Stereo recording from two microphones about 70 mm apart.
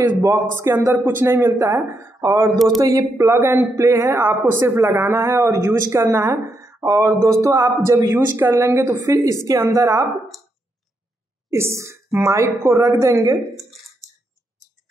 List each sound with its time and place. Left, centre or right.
0.2 s speech: right
2.5 s speech: centre
2.8 s speech: right
3.3 s speech: right
6.4 s a woman's voice: right
11.5 s a woman's voice: right
14.0 s clicking: centre